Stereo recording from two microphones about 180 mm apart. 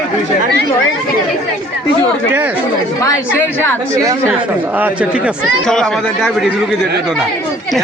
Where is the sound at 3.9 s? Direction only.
20° right (ahead or behind).